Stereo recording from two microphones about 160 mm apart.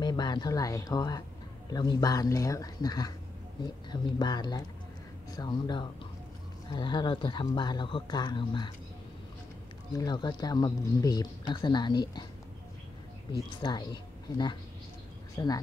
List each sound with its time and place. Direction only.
0.0 s speech: 25° left (ahead or behind)
9.9 s speech: 25° left (ahead or behind)
13.6 s speech: 25° left (ahead or behind)